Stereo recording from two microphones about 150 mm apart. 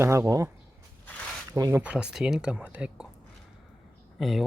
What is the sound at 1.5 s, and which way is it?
Speech, 20° right (ahead or behind).